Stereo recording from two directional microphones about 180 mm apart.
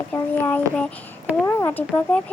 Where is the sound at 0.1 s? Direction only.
10° left (ahead or behind).